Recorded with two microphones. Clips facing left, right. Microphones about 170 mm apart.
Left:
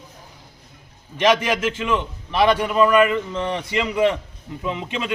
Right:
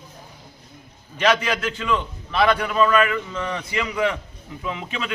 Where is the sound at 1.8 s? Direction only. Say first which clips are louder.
Left 1 dB; 15° left (ahead or behind).